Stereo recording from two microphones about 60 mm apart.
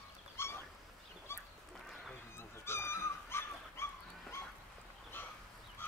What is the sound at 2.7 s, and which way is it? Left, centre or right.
Dog, left.